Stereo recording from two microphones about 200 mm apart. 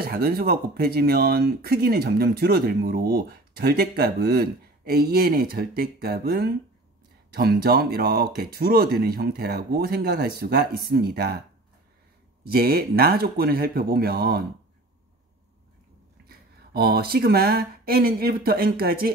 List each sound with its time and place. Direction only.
0.0 s speech: 50° right (ahead or behind)
12.4 s speech: 50° right (ahead or behind)
16.3 s speech: 50° right (ahead or behind)